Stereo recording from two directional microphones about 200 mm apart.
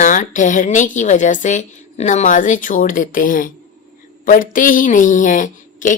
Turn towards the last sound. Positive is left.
turn(degrees=40)  # may be behind; listen again after turning